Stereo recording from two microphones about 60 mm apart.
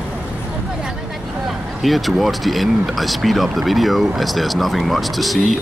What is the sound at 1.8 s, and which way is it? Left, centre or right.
Speech, centre.